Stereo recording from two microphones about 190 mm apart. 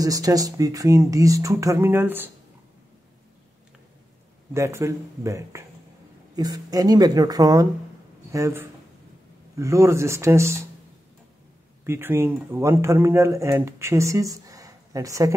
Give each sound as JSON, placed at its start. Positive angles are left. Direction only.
{"t": 0.0, "sound": "a man's voice", "side_deg": -20}
{"t": 4.6, "sound": "a man's voice", "side_deg": -15}
{"t": 11.8, "sound": "a man's voice", "side_deg": -10}